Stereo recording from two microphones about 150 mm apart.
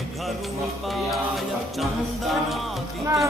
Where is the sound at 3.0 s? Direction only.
20° right (ahead or behind).